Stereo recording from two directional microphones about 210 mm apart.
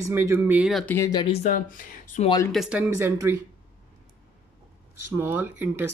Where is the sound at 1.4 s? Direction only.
35° left (ahead or behind).